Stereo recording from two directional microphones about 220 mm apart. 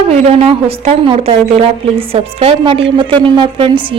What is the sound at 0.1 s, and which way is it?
A woman's voice, 30° right (ahead or behind).